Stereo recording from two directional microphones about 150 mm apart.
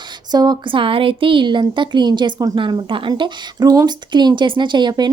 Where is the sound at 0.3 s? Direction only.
25° right (ahead or behind).